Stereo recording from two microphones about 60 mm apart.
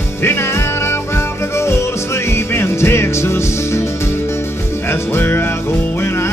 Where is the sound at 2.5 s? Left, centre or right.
Left.